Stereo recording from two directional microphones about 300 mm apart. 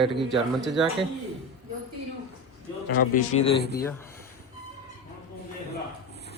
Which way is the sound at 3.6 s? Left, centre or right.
Left.